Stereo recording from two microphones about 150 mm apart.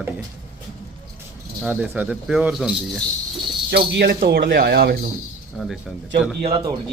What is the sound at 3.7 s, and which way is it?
Speech, 90° right.